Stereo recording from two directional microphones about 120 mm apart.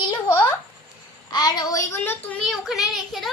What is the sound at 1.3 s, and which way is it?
Speech, 35° left (ahead or behind).